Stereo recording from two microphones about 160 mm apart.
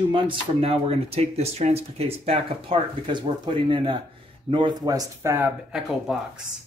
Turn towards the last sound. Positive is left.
turn(degrees=-5)  # may be behind; listen again after turning